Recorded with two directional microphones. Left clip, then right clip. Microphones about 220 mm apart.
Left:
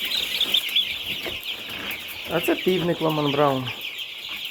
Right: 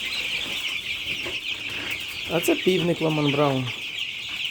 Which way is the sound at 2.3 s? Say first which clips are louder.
Even; 20° right (ahead or behind).